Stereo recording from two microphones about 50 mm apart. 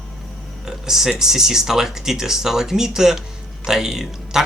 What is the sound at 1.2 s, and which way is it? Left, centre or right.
Speech, centre.